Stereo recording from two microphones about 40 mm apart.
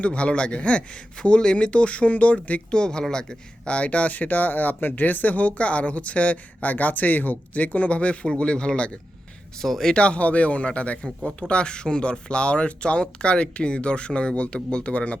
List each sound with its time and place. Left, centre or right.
0.0 s speech: left
2.7 s speech: centre
3.8 s speech: left
9.6 s speech: centre
9.9 s speech: left